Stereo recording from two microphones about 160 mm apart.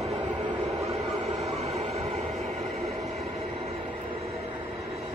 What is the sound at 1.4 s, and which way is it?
Train, 40° right (ahead or behind).